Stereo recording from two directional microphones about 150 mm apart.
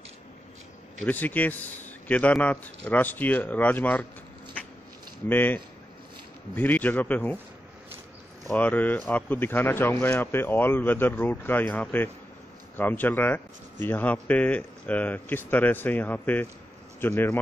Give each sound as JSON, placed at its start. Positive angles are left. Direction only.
{"t": 1.0, "sound": "speech", "side_deg": 10}
{"t": 5.3, "sound": "speech", "side_deg": 10}
{"t": 8.5, "sound": "speech", "side_deg": 10}